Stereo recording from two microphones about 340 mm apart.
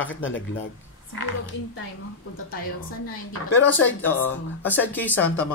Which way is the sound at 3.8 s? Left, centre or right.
Centre.